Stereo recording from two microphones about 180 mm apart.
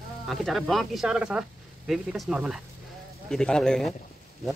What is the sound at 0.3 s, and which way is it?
Speech, centre (ahead or behind).